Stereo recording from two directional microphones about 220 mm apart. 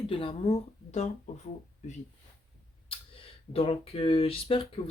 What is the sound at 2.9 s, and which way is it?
Speech, 25° left (ahead or behind).